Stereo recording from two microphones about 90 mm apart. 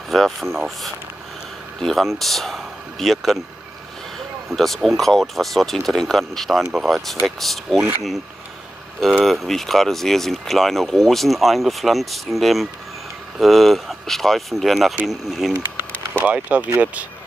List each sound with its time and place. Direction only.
0.1 s speech: 5° left (ahead or behind)
1.8 s speech: centre (ahead or behind)
4.6 s speech: centre (ahead or behind)
6.6 s speech: 10° right (ahead or behind)
6.9 s speech: centre (ahead or behind)
9.2 s speech: centre (ahead or behind)
15.5 s a sound: 25° right (ahead or behind)
16.3 s speech: 15° right (ahead or behind)